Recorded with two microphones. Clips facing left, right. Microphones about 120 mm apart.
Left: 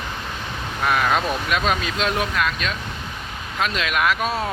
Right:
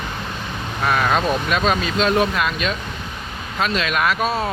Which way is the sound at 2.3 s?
10° right (ahead or behind).